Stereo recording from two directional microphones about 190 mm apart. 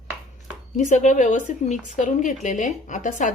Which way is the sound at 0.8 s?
40° left (ahead or behind).